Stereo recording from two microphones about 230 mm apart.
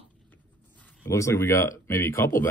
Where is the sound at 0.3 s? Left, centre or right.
Centre.